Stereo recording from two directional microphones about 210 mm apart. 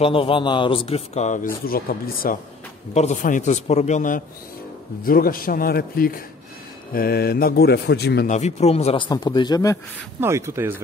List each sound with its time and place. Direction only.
0.0 s speech: 25° left (ahead or behind); by 2.3 s 45° left (ahead or behind)
2.9 s a man's voice: 35° left (ahead or behind); by 8.3 s 50° left (ahead or behind)
8.3 s speech: 30° left (ahead or behind); by 9.8 s 15° left (ahead or behind)
10.2 s speech: 10° right (ahead or behind)